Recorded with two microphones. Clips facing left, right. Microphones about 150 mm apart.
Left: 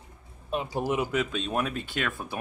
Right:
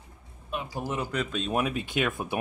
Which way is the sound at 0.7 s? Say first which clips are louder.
Left 4 dB; 15° left (ahead or behind).